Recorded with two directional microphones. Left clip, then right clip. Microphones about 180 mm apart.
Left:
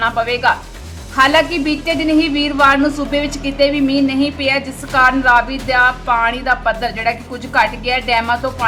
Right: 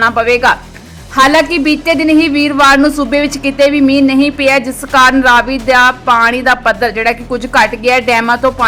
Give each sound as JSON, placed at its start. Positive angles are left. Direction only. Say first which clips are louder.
{"t": 0.0, "sound": "a woman's voice", "louder": "right 6 dB", "side_deg": -40}